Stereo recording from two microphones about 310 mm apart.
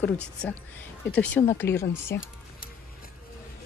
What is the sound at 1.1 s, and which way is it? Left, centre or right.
Speech, centre.